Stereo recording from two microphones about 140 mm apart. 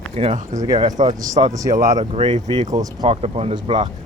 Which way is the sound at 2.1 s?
40° right (ahead or behind).